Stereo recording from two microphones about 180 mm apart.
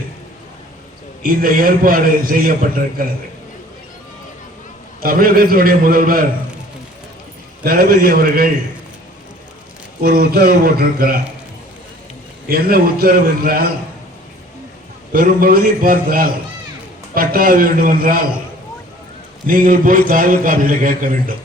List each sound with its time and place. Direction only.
1.2 s a man's voice: 50° right (ahead or behind)
4.9 s a man's voice: 55° right (ahead or behind)
7.6 s a man's voice: 55° right (ahead or behind)
10.0 s a man's voice: 60° right (ahead or behind)
12.5 s a man's voice: 55° right (ahead or behind)
15.1 s a man's voice: 50° right (ahead or behind)
19.5 s a man's voice: 50° right (ahead or behind)